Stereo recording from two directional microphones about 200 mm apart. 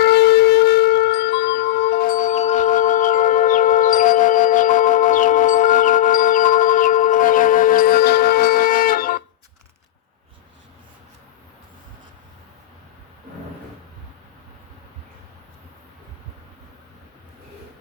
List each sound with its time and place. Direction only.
0.0 s music: 55° left (ahead or behind)